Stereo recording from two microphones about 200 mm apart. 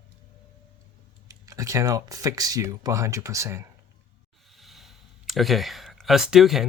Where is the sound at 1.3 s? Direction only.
15° right (ahead or behind).